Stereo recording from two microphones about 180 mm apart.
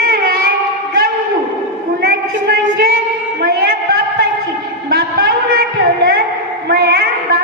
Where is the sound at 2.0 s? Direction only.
55° right (ahead or behind).